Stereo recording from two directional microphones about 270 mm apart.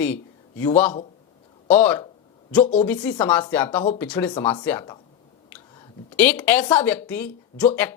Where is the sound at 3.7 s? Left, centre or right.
Left.